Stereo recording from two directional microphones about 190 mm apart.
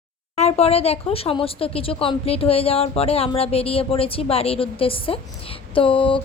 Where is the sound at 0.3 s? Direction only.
35° left (ahead or behind).